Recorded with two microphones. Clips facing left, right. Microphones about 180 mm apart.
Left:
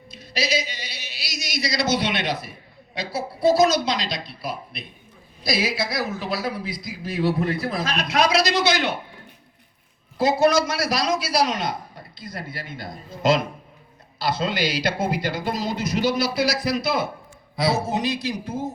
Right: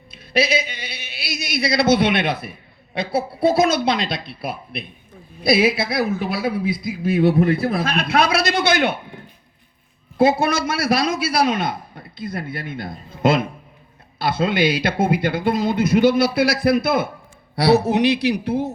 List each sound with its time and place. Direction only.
0.1 s a woman's voice: 55° right (ahead or behind)
10.2 s a woman's voice: 55° right (ahead or behind)
17.5 s a man's voice: 70° right (ahead or behind)